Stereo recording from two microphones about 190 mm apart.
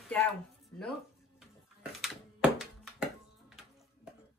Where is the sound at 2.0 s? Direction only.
5° right (ahead or behind).